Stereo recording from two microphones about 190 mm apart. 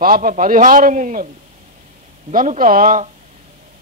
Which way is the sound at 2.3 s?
45° right (ahead or behind).